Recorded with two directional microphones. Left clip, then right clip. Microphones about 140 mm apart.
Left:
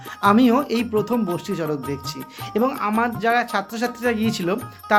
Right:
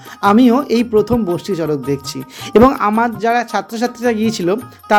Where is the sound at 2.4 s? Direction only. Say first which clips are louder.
Right 11 dB; 80° right.